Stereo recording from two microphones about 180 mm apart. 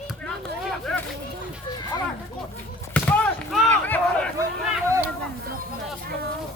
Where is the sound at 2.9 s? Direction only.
5° left (ahead or behind).